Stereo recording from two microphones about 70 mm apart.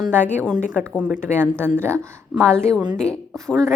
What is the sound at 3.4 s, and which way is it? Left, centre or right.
Speech, right.